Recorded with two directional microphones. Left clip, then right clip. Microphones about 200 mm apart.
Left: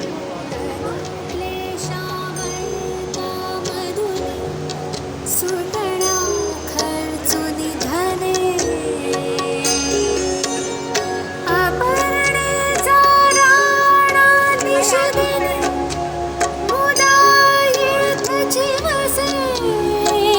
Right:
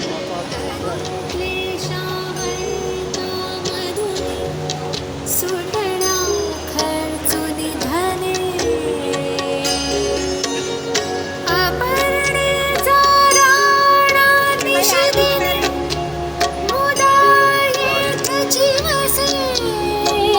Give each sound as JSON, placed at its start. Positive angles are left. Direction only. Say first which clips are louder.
{"t": 5.5, "sound": "music", "louder": "right 1 dB", "side_deg": 60}
{"t": 7.9, "sound": "music", "louder": "left 1 dB", "side_deg": 55}
{"t": 9.6, "sound": "music", "louder": "left 1 dB", "side_deg": 55}
{"t": 11.4, "sound": "music", "louder": "left 1 dB", "side_deg": 50}